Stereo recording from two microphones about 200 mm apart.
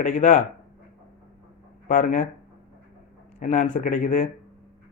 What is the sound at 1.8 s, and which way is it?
Speech, 40° left (ahead or behind).